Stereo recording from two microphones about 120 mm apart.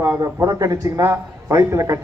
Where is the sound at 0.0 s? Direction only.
20° right (ahead or behind).